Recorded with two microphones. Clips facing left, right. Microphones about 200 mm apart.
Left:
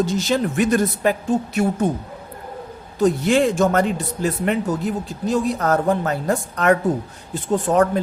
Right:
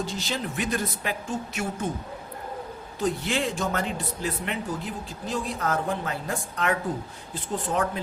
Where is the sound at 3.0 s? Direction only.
45° left (ahead or behind).